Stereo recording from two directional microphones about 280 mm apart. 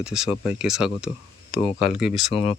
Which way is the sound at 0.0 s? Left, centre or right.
Centre.